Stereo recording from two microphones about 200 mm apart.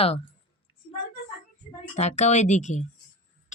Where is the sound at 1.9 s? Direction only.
35° left (ahead or behind).